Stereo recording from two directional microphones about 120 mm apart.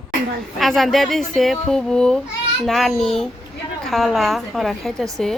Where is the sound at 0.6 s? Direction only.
Centre (ahead or behind).